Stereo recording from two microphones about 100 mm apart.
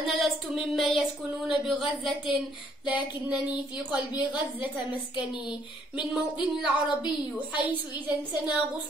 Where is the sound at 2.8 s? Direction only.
15° right (ahead or behind).